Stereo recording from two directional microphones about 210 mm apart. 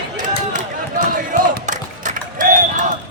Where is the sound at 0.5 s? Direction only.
40° right (ahead or behind).